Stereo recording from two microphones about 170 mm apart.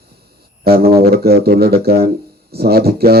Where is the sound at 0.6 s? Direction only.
65° right (ahead or behind).